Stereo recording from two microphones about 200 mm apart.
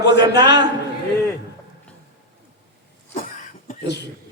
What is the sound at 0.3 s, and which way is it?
Speech, 60° left (ahead or behind).